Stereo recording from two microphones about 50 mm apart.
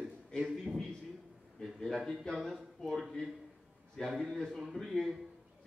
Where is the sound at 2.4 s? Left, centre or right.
Centre.